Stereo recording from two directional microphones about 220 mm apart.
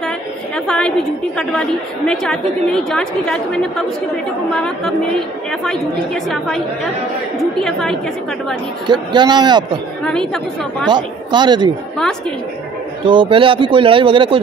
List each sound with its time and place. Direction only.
0.7 s a woman's voice: 5° left (ahead or behind)
7.3 s a woman's voice: centre (ahead or behind)
8.8 s speech: 20° right (ahead or behind)
10.0 s a woman's voice: 5° left (ahead or behind)
10.9 s speech: 20° right (ahead or behind)
13.0 s speech: 20° right (ahead or behind)